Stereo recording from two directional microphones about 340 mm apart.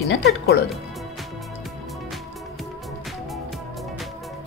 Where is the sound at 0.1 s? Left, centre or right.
Left.